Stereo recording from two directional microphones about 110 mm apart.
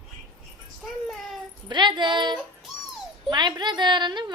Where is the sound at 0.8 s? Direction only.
Centre (ahead or behind).